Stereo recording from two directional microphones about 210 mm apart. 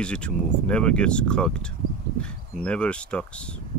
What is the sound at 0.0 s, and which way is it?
Speech, 5° left (ahead or behind).